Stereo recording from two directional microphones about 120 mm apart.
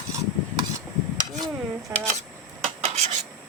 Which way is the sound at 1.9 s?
25° right (ahead or behind).